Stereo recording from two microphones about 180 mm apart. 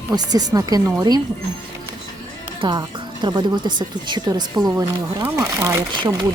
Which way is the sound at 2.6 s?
25° right (ahead or behind).